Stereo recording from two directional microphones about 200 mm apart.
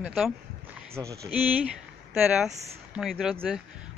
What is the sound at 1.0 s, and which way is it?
Speech, 15° right (ahead or behind).